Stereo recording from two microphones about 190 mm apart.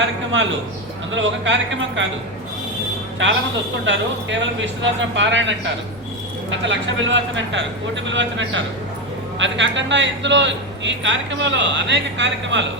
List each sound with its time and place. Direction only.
1.1 s a man's voice: 80° right
3.2 s a man's voice: 80° right
6.5 s a man's voice: 80° right